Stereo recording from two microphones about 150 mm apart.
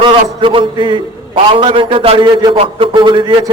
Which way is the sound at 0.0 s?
35° right (ahead or behind).